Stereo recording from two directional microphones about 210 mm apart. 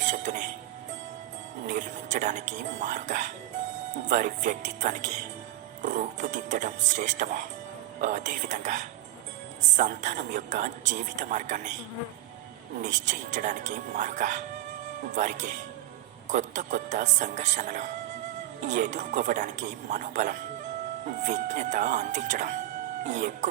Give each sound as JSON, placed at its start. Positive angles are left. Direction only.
{"t": 0.0, "sound": "music", "side_deg": -35}
{"t": 1.6, "sound": "a man's voice", "side_deg": -35}
{"t": 12.8, "sound": "a man's voice", "side_deg": -35}